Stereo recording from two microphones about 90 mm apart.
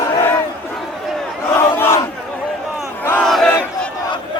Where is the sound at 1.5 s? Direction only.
25° left (ahead or behind).